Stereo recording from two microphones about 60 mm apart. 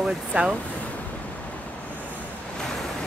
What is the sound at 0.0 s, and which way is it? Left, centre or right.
Speech, centre.